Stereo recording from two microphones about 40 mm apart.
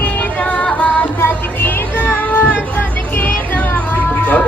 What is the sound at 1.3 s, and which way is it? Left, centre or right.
Music, left.